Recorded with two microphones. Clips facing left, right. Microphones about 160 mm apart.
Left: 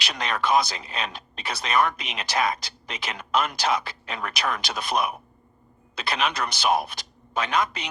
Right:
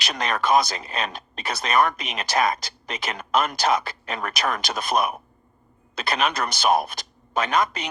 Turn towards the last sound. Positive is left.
turn(degrees=-45)  # may be behind; listen again after turning